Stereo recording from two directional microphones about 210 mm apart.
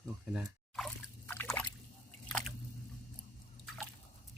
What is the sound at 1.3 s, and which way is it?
Trickle, 10° left (ahead or behind).